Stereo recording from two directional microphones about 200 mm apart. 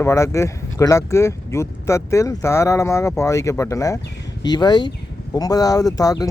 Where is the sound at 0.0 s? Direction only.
15° left (ahead or behind).